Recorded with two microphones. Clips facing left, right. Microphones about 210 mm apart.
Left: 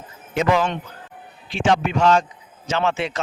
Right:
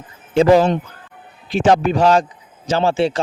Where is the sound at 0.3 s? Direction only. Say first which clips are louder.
Right 8 dB; 35° right (ahead or behind).